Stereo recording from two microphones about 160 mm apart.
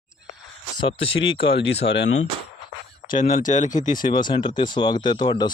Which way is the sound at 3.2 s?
55° left (ahead or behind).